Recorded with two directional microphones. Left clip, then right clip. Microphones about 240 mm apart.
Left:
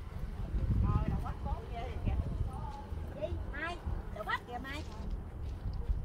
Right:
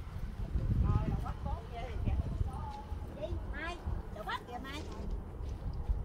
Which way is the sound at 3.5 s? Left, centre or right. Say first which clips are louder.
Left 1 dB; centre.